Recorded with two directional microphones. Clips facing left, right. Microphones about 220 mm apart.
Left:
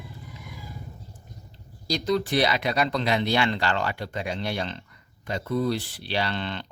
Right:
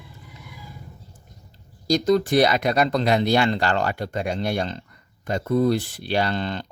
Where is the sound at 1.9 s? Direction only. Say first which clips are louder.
Right 6 dB; 45° right (ahead or behind).